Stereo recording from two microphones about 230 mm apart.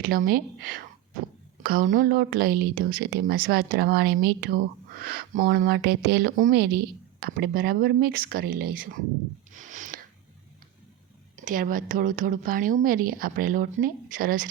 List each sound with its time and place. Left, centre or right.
0.0 s a woman's voice: right
9.5 s a sound: right
11.3 s a woman's voice: right